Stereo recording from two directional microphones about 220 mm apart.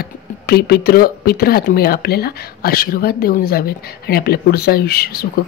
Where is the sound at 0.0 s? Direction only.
45° left (ahead or behind).